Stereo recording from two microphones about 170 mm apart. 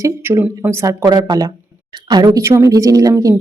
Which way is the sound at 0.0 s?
15° right (ahead or behind).